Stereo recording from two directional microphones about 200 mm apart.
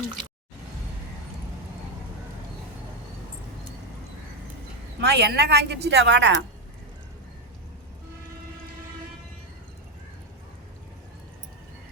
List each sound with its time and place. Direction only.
4.9 s speech: 55° right (ahead or behind)